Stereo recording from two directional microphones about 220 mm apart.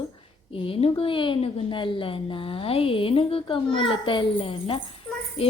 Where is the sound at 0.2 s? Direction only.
25° left (ahead or behind).